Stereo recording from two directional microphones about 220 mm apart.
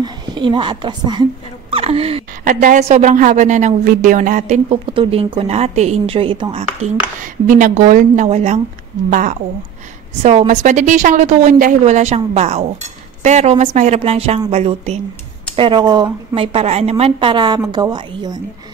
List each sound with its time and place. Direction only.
0.0 s speech: 20° right (ahead or behind)
2.4 s a woman's voice: 40° right (ahead or behind)
7.4 s a woman's voice: 35° right (ahead or behind)
10.2 s a woman's voice: 30° right (ahead or behind)